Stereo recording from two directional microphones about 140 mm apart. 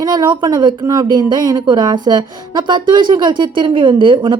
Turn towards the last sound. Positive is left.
turn(degrees=-35)  # may be behind; listen again after turning